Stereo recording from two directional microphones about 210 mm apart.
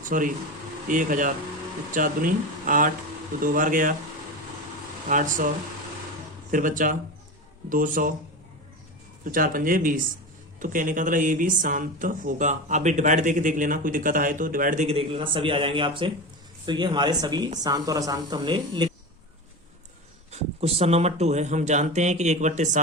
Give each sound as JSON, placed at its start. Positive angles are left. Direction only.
{"t": 0.0, "sound": "speech", "side_deg": -40}
{"t": 5.0, "sound": "speech", "side_deg": -40}
{"t": 6.5, "sound": "speech", "side_deg": -40}
{"t": 9.2, "sound": "a woman's voice", "side_deg": -40}
{"t": 20.3, "sound": "speech", "side_deg": -30}